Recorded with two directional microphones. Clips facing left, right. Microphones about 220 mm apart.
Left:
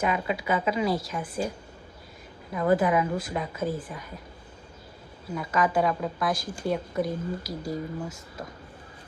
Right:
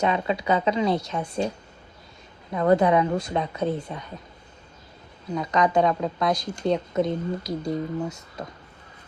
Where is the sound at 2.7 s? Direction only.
25° right (ahead or behind).